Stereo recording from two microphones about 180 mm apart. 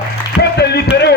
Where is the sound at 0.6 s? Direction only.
65° left (ahead or behind).